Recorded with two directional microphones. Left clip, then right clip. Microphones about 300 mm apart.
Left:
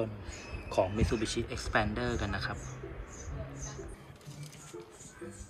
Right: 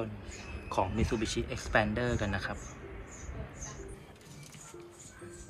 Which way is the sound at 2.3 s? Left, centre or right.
Right.